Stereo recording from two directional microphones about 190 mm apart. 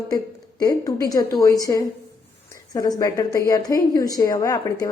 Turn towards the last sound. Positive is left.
turn(degrees=20)  # may be behind; listen again after turning